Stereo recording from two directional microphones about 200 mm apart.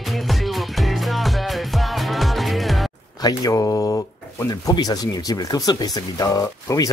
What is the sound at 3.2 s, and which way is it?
Speech, 15° left (ahead or behind).